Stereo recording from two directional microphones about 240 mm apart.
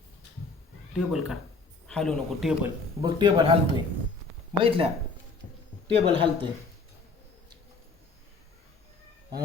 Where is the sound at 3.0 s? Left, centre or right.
Centre.